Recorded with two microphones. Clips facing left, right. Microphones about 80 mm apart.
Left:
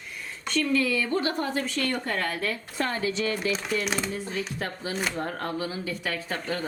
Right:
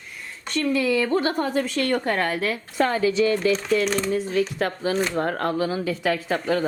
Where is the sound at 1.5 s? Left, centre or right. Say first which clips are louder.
Right 6 dB; right.